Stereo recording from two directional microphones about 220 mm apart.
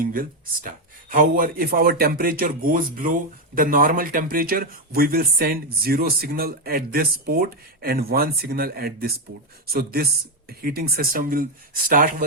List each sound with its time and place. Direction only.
0.0 s speech: 40° right (ahead or behind)